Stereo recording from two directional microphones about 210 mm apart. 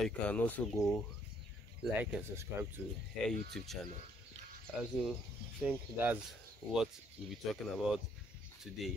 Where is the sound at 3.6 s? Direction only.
Centre (ahead or behind).